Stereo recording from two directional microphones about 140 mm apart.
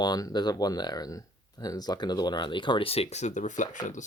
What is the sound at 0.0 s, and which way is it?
Speech, 30° left (ahead or behind).